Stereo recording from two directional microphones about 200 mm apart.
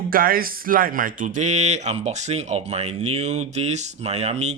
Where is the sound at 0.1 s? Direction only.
45° right (ahead or behind).